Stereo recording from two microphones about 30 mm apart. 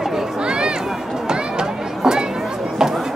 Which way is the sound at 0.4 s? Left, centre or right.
Right.